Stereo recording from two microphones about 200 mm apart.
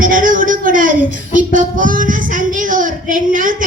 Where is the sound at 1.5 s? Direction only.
40° right (ahead or behind).